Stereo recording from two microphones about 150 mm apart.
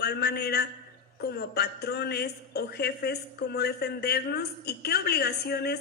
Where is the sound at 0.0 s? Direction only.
90° left.